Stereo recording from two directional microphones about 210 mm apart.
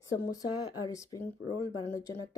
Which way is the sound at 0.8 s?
15° left (ahead or behind).